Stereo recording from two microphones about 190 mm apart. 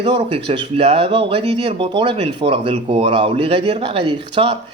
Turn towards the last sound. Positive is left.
turn(degrees=-30)  # may be behind; listen again after turning